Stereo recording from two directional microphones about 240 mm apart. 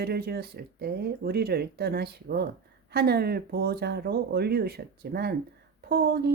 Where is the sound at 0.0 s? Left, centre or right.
Right.